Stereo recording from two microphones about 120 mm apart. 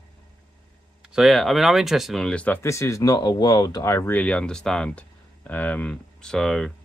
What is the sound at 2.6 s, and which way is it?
Speech, 25° left (ahead or behind).